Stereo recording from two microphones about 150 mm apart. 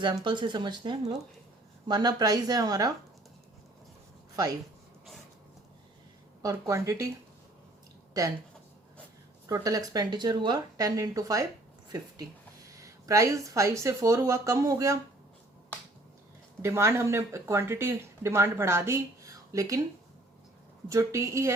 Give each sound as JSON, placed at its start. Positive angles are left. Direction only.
{"t": 0.3, "sound": "speech", "side_deg": -30}
{"t": 6.4, "sound": "speech", "side_deg": -20}
{"t": 9.5, "sound": "speech", "side_deg": -25}
{"t": 11.9, "sound": "a sound", "side_deg": -25}
{"t": 12.8, "sound": "speech", "side_deg": -20}
{"t": 16.6, "sound": "speech", "side_deg": -20}
{"t": 20.9, "sound": "speech", "side_deg": -20}